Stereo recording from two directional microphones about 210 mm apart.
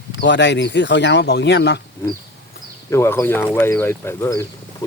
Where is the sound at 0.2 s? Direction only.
55° left (ahead or behind).